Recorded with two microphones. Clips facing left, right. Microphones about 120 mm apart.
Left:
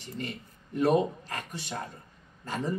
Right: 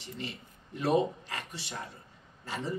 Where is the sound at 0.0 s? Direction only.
50° left (ahead or behind).